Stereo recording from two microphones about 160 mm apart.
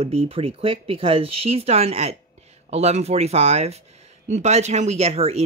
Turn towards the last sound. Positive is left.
turn(degrees=-40)  # may be behind; listen again after turning